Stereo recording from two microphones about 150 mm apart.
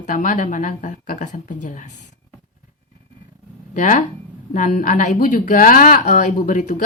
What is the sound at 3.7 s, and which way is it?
Speech, 60° left (ahead or behind).